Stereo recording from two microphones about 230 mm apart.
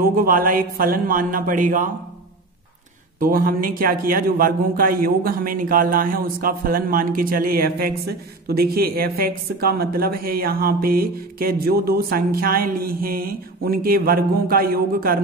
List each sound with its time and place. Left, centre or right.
0.0 s a man's voice: right
3.2 s a man's voice: right